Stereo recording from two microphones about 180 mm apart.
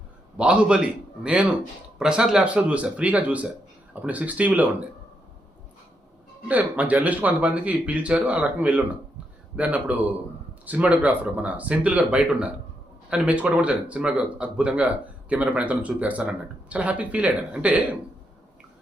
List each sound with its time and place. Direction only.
0.3 s a man's voice: 5° right (ahead or behind)
6.5 s speech: 10° right (ahead or behind)